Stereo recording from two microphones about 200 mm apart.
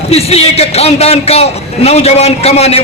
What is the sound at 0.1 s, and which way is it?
A man's voice, 30° left (ahead or behind).